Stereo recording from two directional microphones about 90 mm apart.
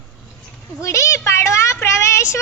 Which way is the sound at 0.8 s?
35° left (ahead or behind).